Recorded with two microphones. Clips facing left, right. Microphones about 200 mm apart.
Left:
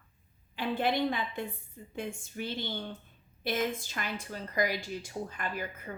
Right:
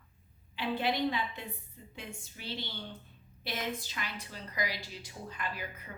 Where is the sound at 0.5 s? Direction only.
50° left (ahead or behind).